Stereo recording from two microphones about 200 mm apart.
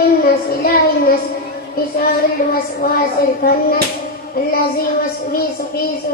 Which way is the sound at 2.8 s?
50° left (ahead or behind).